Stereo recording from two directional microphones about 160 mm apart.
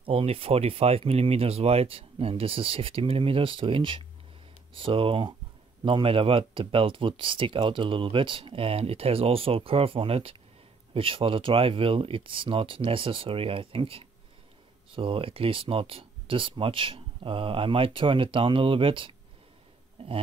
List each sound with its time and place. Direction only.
0.0 s speech: 40° right (ahead or behind)